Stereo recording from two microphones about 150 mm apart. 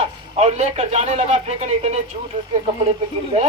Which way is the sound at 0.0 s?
45° right (ahead or behind).